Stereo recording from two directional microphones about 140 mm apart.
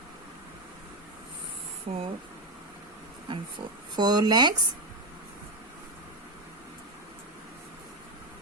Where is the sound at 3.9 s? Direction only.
30° right (ahead or behind).